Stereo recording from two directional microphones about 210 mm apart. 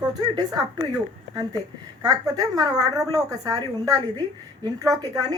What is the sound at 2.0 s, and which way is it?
A woman's voice, 15° right (ahead or behind).